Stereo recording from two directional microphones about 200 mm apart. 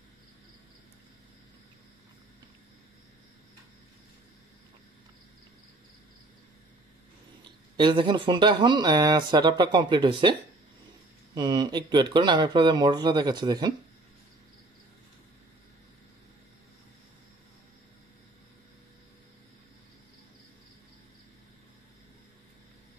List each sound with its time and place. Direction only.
7.7 s speech: 25° right (ahead or behind)
11.3 s speech: 20° right (ahead or behind)